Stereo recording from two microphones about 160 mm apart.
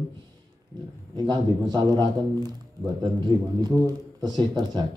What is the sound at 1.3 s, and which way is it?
A man's voice, 25° right (ahead or behind).